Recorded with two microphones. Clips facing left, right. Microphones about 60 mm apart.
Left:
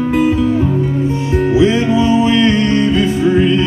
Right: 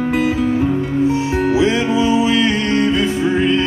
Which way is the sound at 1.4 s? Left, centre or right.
Centre.